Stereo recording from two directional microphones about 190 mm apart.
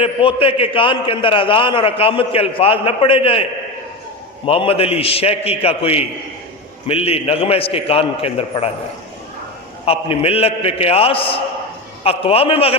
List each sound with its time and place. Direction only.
0.0 s a man's voice: 30° left (ahead or behind)
4.4 s a man's voice: 30° left (ahead or behind)
9.8 s a man's voice: 30° left (ahead or behind)